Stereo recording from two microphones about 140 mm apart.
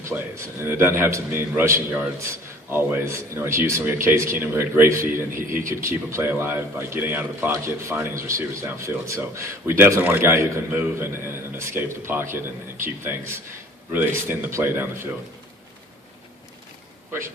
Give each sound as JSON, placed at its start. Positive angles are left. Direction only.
{"t": 0.0, "sound": "a man's voice", "side_deg": -20}
{"t": 17.1, "sound": "a man's voice", "side_deg": -20}